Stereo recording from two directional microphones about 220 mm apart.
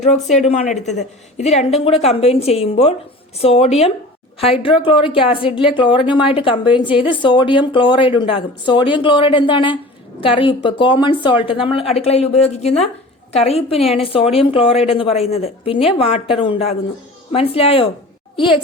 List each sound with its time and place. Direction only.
0.3 s speech: 30° left (ahead or behind)